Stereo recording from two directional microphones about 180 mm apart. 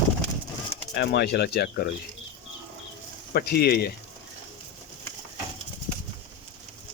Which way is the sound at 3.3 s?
60° left (ahead or behind).